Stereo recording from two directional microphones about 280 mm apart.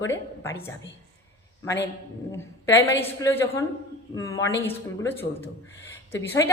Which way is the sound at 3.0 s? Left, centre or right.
Centre.